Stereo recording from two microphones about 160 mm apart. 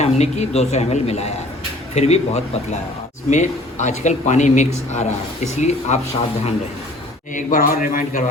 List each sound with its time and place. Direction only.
0.0 s a man's voice: 45° left (ahead or behind)
7.3 s a man's voice: 55° left (ahead or behind)